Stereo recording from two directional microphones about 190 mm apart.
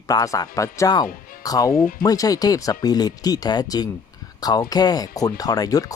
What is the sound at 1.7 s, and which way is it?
Speech, 45° left (ahead or behind).